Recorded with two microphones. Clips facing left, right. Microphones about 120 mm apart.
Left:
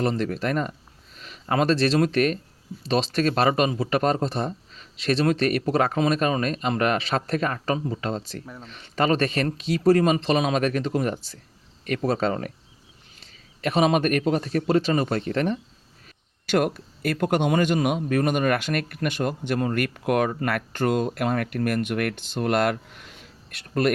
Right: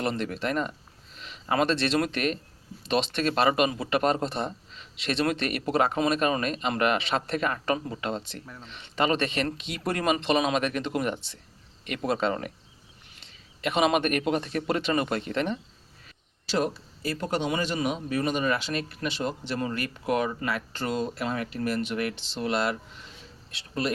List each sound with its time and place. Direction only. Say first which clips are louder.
0.0 s speech: left 4 dB; 40° left (ahead or behind)
16.0 s a sound: left 6 dB; 55° left (ahead or behind)
16.7 s speech: left 5 dB; 60° left (ahead or behind)